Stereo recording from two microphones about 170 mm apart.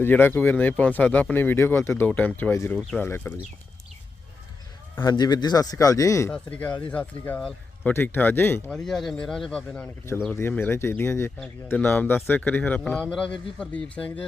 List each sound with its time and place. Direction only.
0.0 s speech: 10° left (ahead or behind)
4.9 s a man's voice: 25° left (ahead or behind)
6.3 s speech: 10° left (ahead or behind)